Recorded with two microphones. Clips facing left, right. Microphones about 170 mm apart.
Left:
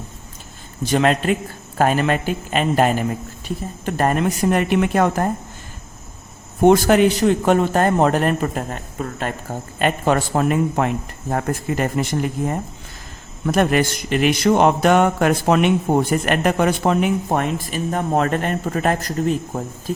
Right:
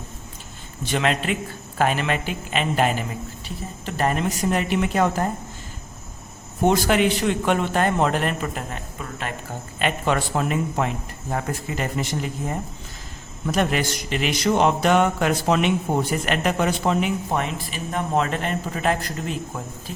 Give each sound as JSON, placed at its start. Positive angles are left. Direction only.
{"t": 0.8, "sound": "speech", "side_deg": 40}
{"t": 6.7, "sound": "a man's voice", "side_deg": 45}